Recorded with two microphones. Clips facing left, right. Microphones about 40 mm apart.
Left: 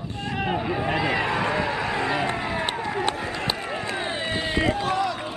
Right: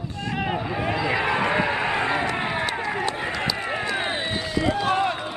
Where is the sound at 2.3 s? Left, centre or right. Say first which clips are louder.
Right 1 dB; right.